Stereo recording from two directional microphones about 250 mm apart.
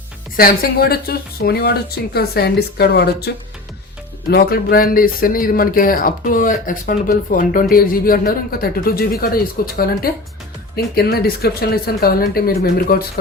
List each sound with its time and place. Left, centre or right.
0.3 s speech: left